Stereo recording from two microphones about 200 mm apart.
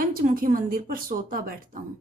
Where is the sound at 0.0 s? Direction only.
45° right (ahead or behind).